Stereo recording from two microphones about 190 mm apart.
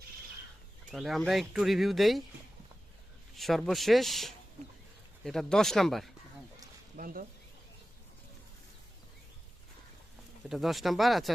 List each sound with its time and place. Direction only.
0.9 s speech: centre (ahead or behind)
3.3 s speech: centre (ahead or behind)
6.9 s speech: 50° right (ahead or behind)
10.5 s speech: centre (ahead or behind)